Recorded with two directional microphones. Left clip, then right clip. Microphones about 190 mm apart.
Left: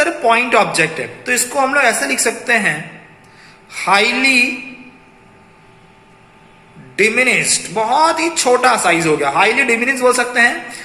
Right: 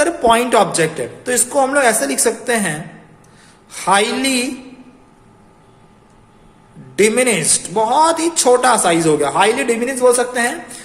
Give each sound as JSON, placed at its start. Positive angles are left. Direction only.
{"t": 0.3, "sound": "a woman's voice", "side_deg": -35}
{"t": 6.9, "sound": "a woman's voice", "side_deg": -30}